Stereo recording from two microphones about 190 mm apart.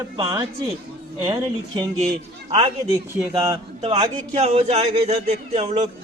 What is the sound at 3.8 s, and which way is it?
A man's voice, 30° right (ahead or behind).